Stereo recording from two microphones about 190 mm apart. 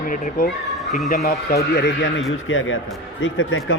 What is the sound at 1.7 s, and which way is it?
Speech, 65° left (ahead or behind).